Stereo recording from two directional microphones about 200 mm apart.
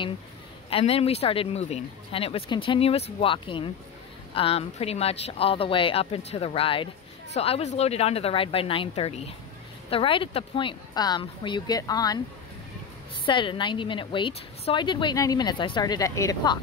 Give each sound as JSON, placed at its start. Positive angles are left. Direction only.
{"t": 0.7, "sound": "a woman's voice", "side_deg": 30}
{"t": 13.2, "sound": "a woman's voice", "side_deg": 25}